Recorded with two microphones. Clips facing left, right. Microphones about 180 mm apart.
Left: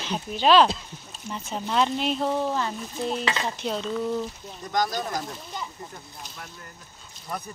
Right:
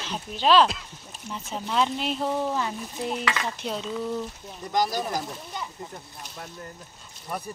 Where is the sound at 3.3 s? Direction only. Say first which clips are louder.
Left 1 dB; 25° left (ahead or behind).